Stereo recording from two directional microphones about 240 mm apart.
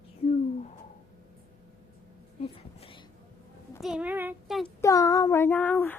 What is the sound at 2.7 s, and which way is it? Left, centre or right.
Whispering, left.